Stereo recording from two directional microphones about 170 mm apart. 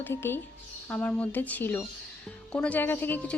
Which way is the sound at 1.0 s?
10° left (ahead or behind).